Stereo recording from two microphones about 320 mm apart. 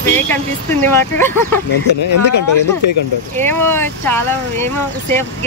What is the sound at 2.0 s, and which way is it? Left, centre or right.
Speech, left.